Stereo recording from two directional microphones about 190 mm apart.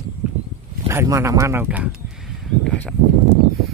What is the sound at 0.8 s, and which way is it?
Speech, 15° right (ahead or behind).